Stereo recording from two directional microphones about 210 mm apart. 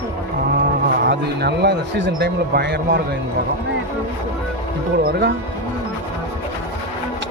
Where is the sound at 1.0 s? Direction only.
50° right (ahead or behind).